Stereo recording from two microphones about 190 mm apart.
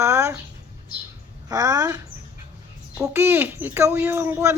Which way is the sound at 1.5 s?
20° right (ahead or behind).